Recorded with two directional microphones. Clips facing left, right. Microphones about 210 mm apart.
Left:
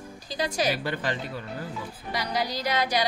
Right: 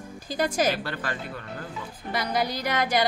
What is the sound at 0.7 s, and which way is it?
Speech, 15° left (ahead or behind).